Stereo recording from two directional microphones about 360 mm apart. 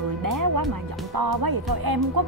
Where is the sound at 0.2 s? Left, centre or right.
Right.